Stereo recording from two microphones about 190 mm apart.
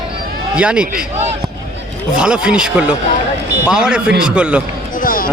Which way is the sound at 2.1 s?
5° right (ahead or behind).